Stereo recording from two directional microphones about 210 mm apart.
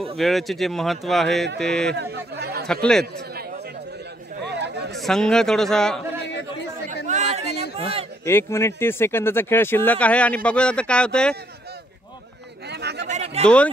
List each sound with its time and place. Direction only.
0.2 s speech: centre (ahead or behind)
2.0 s speech: 55° right (ahead or behind)
2.6 s speech: 5° left (ahead or behind)
4.4 s chatter: 55° right (ahead or behind)
4.9 s speech: centre (ahead or behind)
7.1 s a sound: 35° right (ahead or behind)
7.7 s a man's voice: 25° right (ahead or behind)
8.3 s speech: 10° left (ahead or behind)
12.6 s chatter: 55° right (ahead or behind)
13.1 s a sound: 30° right (ahead or behind)
13.4 s a man's voice: 5° left (ahead or behind)